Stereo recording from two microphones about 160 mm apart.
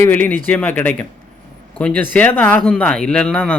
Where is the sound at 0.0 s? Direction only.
10° left (ahead or behind).